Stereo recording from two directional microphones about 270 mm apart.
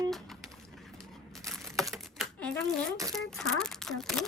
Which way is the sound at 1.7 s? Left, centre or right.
Centre.